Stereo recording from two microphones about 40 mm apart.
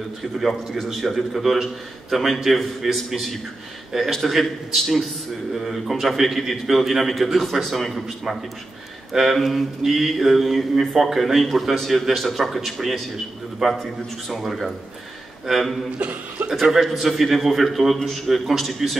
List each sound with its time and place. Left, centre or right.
0.4 s mantra: centre
13.6 s a man's voice: centre
14.3 s mantra: centre
16.7 s a man's voice: centre
17.0 s mantra: centre
18.3 s a man's voice: centre
18.6 s mantra: centre